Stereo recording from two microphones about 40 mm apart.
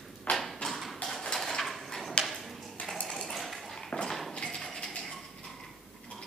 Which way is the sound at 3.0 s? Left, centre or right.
Centre.